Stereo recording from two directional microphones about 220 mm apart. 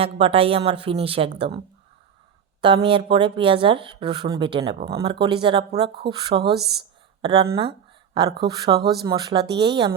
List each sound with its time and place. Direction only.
0.0 s speech: 25° right (ahead or behind)
6.4 s a woman's voice: 45° right (ahead or behind)
7.2 s speech: 20° right (ahead or behind)
8.8 s a woman's voice: 45° right (ahead or behind)
9.0 s speech: 20° right (ahead or behind)